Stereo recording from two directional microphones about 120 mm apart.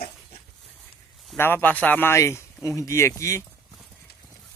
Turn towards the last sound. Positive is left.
turn(degrees=25)  # may be behind; listen again after turning